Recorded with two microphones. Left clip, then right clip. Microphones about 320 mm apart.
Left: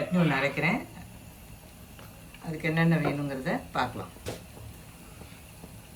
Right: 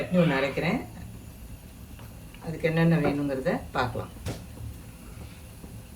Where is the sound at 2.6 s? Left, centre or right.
Centre.